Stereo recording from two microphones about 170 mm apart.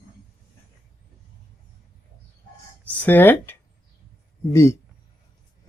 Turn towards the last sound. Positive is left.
turn(degrees=15)  # may be behind; listen again after turning